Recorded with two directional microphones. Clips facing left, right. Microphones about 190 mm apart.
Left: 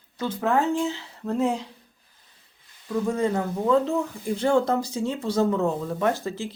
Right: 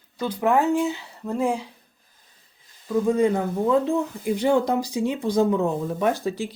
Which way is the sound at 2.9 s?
15° right (ahead or behind).